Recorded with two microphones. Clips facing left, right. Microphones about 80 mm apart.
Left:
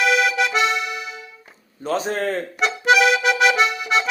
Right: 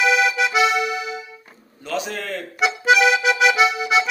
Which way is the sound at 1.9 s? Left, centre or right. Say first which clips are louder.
Left 4 dB; left.